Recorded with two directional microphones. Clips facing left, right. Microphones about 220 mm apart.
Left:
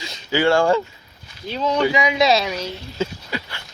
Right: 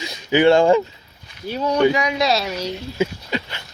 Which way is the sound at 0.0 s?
20° right (ahead or behind).